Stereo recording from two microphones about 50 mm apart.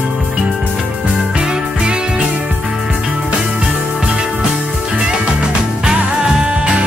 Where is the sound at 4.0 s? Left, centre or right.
Right.